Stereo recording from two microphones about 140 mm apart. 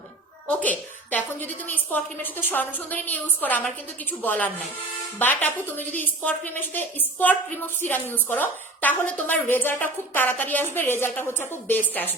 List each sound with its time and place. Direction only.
0.4 s a woman's voice: 10° left (ahead or behind)